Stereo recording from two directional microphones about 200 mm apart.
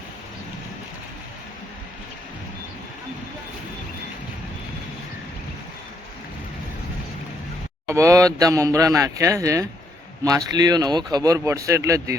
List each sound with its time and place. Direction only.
7.9 s speech: 15° right (ahead or behind)